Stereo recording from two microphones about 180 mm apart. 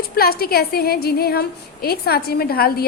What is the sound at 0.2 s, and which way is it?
A woman's voice, 60° left (ahead or behind).